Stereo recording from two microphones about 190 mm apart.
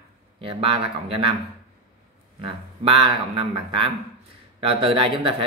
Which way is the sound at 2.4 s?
30° right (ahead or behind).